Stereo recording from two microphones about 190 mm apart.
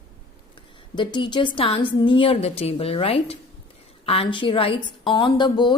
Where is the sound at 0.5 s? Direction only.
25° left (ahead or behind).